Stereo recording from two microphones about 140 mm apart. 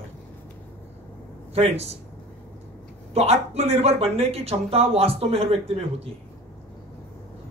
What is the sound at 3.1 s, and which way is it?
Speech, 45° right (ahead or behind).